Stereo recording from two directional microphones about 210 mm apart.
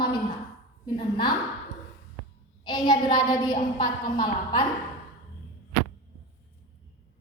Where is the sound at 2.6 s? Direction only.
20° left (ahead or behind).